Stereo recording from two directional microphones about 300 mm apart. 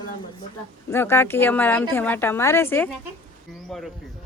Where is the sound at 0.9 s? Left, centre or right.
Centre.